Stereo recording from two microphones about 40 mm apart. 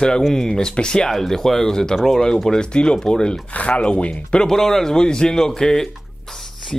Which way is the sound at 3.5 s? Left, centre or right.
Left.